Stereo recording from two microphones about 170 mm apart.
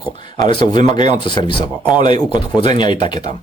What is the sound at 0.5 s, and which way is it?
Speech, 30° left (ahead or behind).